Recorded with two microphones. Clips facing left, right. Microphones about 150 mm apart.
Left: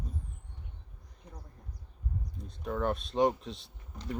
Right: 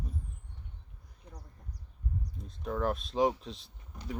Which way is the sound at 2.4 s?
Centre (ahead or behind).